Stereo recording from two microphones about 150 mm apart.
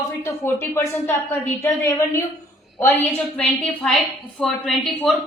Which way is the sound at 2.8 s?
15° left (ahead or behind).